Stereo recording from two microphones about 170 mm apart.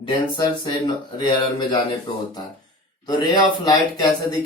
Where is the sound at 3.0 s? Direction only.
25° left (ahead or behind).